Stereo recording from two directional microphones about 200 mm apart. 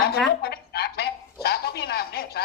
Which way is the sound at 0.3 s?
50° left (ahead or behind).